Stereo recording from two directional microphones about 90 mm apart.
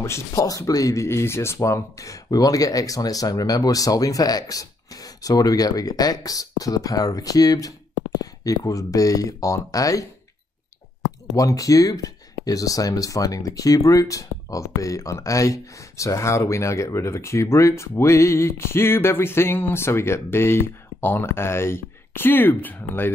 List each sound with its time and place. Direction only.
0.0 s speech: 35° left (ahead or behind)
11.3 s speech: 40° left (ahead or behind); by 23.1 s 20° left (ahead or behind)